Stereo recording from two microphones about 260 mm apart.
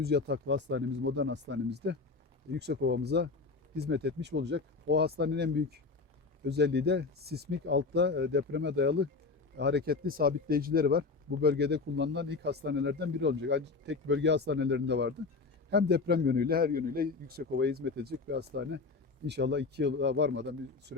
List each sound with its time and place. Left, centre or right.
0.0 s speech: right
6.5 s speech: right